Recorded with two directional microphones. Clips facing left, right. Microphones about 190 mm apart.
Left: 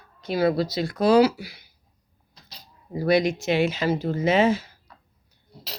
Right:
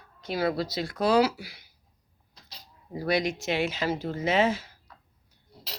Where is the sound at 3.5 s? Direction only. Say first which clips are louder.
Left 6 dB; 10° left (ahead or behind).